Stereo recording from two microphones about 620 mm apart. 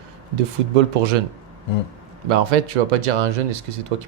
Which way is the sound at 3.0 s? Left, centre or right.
Right.